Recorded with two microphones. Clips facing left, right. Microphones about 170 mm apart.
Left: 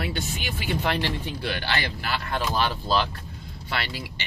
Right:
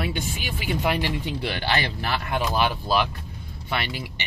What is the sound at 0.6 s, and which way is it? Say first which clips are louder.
Speech: right 2 dB; 10° right (ahead or behind).